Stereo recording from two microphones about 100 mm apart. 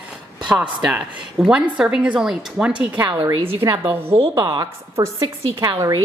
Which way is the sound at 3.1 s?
60° right (ahead or behind).